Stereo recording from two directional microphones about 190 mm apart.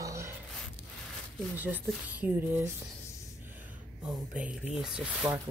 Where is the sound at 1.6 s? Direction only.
10° right (ahead or behind).